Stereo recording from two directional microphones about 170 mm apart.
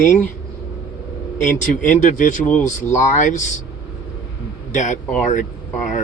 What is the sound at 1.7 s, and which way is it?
A man's voice, 50° left (ahead or behind).